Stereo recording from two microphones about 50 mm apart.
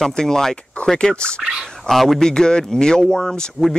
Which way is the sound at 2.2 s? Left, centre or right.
Centre.